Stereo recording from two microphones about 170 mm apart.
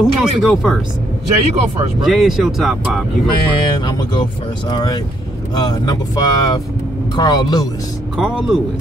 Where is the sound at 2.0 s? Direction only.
Centre (ahead or behind).